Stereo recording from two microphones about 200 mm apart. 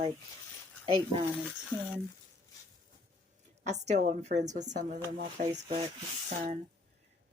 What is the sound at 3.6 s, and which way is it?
Speech, 35° right (ahead or behind).